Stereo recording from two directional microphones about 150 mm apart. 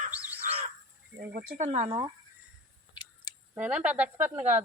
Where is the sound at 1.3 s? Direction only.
70° right (ahead or behind); by 2.0 s 40° right (ahead or behind).